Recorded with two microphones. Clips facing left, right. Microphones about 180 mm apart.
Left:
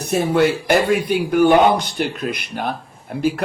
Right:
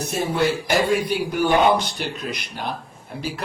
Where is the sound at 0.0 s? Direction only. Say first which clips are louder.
Left 5 dB; 60° left (ahead or behind).